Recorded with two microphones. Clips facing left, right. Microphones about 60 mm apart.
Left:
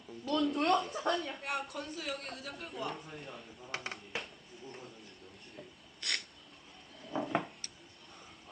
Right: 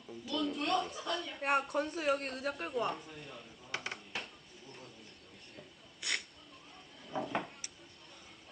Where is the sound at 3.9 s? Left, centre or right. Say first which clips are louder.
Left 1 dB; centre.